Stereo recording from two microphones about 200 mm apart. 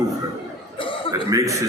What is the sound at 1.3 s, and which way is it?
Speech, 15° right (ahead or behind).